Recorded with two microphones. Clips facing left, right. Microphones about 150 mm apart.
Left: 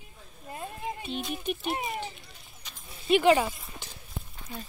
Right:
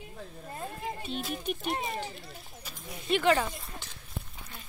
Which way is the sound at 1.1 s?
Centre (ahead or behind).